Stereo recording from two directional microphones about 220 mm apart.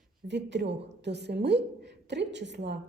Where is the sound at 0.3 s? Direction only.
50° right (ahead or behind).